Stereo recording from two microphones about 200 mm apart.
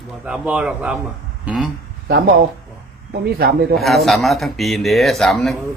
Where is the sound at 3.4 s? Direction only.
50° right (ahead or behind).